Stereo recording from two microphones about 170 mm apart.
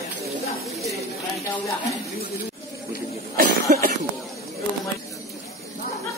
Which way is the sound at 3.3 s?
60° right (ahead or behind).